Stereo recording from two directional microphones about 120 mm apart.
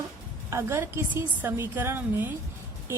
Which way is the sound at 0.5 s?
20° right (ahead or behind).